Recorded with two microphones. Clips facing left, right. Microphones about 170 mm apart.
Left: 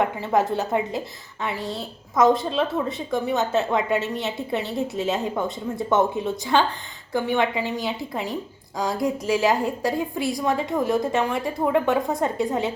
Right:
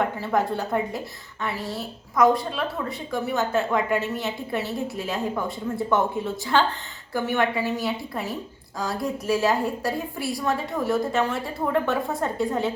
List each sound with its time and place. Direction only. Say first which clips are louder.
0.0 s a woman's voice: left 2 dB; 20° left (ahead or behind)